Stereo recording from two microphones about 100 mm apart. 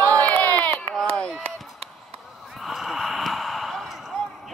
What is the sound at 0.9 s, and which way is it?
Chop, 5° left (ahead or behind).